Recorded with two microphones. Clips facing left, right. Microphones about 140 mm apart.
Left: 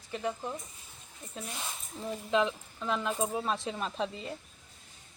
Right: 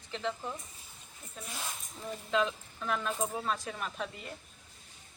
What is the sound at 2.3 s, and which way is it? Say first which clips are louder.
Speech: left 2 dB; 20° left (ahead or behind).